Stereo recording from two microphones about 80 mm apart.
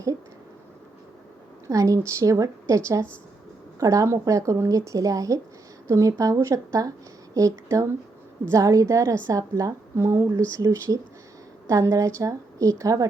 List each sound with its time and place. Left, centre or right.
1.6 s a woman's voice: right